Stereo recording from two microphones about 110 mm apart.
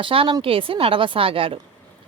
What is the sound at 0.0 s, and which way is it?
A woman's voice, 55° right (ahead or behind).